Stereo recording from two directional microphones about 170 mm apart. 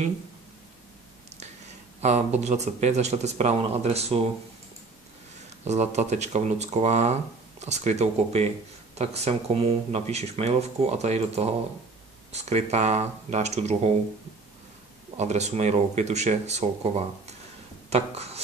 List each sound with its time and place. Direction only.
2.0 s a sound: 45° right (ahead or behind)
2.4 s speech: 40° right (ahead or behind)
5.7 s speech: 40° right (ahead or behind)
15.1 s speech: 40° right (ahead or behind)